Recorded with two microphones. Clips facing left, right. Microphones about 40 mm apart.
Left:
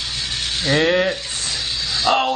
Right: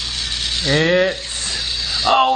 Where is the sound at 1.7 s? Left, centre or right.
Centre.